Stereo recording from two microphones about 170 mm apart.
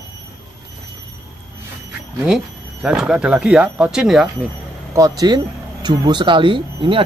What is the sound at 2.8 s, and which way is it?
Speech, 5° right (ahead or behind).